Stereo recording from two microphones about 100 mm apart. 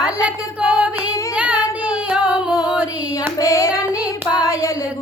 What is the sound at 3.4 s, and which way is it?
Child singing, 30° left (ahead or behind).